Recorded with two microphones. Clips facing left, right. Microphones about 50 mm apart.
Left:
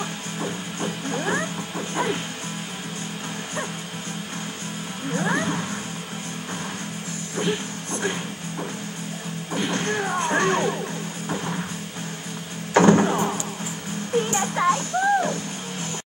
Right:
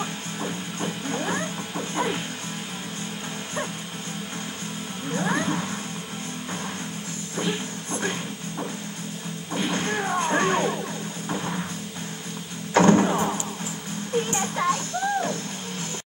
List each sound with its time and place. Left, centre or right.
0.0 s music: centre
5.1 s music: centre
8.0 s music: centre
9.7 s music: centre
12.7 s music: centre